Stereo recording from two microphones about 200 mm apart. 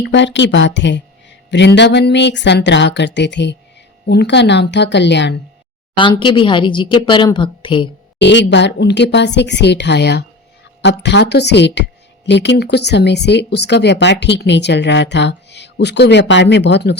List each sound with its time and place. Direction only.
0.0 s a woman's voice: 60° left (ahead or behind)
6.0 s a woman's voice: 25° left (ahead or behind)
8.2 s a woman's voice: 60° left (ahead or behind)